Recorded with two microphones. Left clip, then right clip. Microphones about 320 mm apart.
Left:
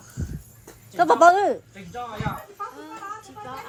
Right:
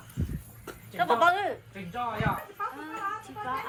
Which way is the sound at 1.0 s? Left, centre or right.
Centre.